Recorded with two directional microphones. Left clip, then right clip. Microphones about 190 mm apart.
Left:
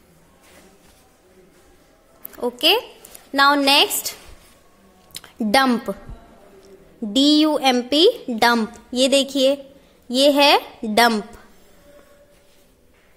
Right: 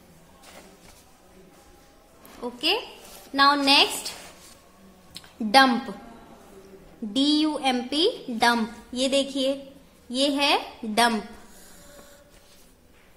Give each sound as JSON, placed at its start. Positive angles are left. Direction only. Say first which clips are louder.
{"t": 2.4, "sound": "a woman's voice", "louder": "left 8 dB", "side_deg": 50}
{"t": 5.1, "sound": "a sound", "louder": "left 1 dB", "side_deg": 45}
{"t": 7.1, "sound": "a woman's voice", "louder": "left 7 dB", "side_deg": 45}